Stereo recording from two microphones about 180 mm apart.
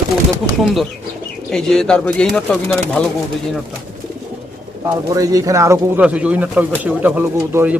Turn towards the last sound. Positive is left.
turn(degrees=-10)  # may be behind; listen again after turning